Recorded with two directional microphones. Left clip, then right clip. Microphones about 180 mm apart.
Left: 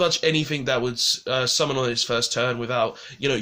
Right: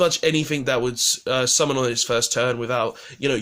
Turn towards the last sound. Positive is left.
turn(degrees=-35)  # may be behind; listen again after turning